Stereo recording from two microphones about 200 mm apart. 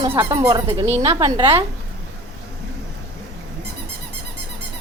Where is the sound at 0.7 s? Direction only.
30° right (ahead or behind).